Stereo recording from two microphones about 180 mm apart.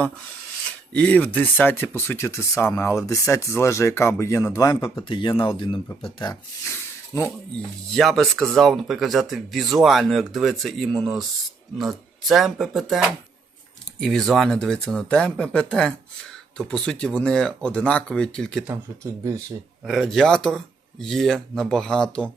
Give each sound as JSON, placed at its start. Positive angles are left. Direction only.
{"t": 0.9, "sound": "speech", "side_deg": 10}
{"t": 6.7, "sound": "a sound", "side_deg": 15}
{"t": 7.9, "sound": "speech", "side_deg": 0}
{"t": 14.0, "sound": "speech", "side_deg": 0}
{"t": 19.8, "sound": "speech", "side_deg": 0}